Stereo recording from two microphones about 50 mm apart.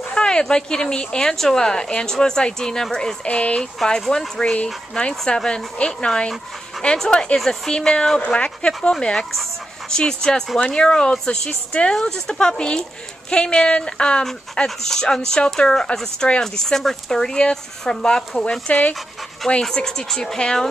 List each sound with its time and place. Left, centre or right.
0.1 s speech: centre
3.3 s speech: left
7.3 s speech: centre
7.7 s speech: centre
9.3 s dog: centre
9.9 s speech: centre
16.6 s speech: centre; by 18.9 s left
19.6 s speech: centre